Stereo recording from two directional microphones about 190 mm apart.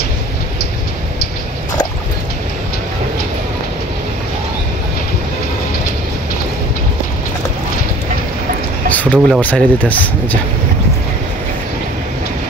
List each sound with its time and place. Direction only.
8.9 s speech: 10° left (ahead or behind)